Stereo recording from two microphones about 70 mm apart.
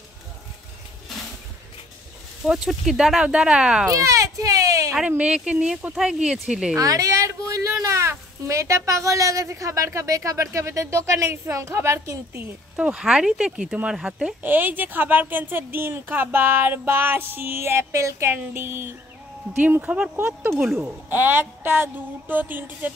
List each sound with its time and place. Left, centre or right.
2.4 s speech: centre
3.9 s a sound: right
5.0 s speech: centre
6.8 s a sound: right
8.1 s speech: right
12.7 s speech: centre
14.4 s a woman's voice: right
19.5 s speech: right
20.2 s a woman's voice: right